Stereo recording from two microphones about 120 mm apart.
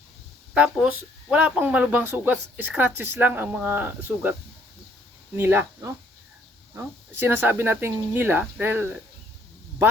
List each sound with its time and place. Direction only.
0.5 s speech: 10° right (ahead or behind)
5.4 s speech: 20° right (ahead or behind)